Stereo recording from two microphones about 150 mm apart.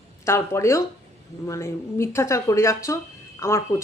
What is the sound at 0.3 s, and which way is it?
Speech, 20° left (ahead or behind).